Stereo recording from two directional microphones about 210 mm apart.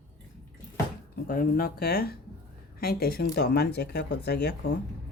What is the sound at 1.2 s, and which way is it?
Speech, 45° left (ahead or behind).